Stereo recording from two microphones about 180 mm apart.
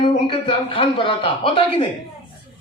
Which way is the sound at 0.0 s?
30° left (ahead or behind).